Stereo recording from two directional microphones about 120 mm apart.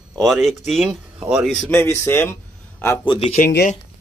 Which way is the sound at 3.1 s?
65° left (ahead or behind).